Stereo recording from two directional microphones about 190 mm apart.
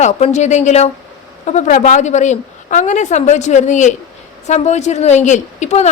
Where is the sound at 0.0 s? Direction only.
35° left (ahead or behind).